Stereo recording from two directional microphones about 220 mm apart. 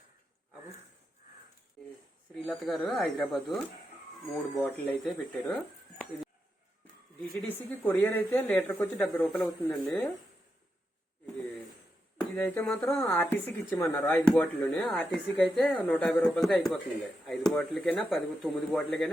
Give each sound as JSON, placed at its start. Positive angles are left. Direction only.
{"t": 2.3, "sound": "speech", "side_deg": 0}
{"t": 12.1, "sound": "speech", "side_deg": 10}